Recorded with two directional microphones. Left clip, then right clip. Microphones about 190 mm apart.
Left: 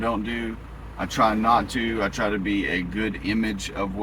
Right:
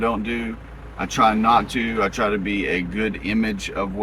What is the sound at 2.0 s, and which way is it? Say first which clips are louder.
Speech: right 6 dB; 15° right (ahead or behind).